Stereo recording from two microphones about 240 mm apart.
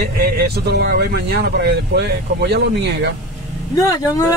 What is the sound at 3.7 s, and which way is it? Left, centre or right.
Speech, centre.